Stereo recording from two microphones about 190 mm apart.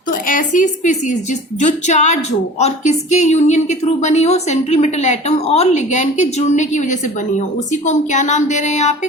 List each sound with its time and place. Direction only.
0.1 s a woman's voice: 45° left (ahead or behind)